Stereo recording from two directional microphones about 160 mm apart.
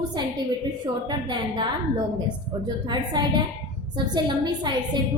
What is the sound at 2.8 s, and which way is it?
Speech, 25° right (ahead or behind).